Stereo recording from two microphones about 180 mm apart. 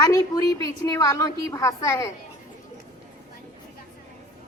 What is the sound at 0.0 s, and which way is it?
A woman's voice, 20° left (ahead or behind).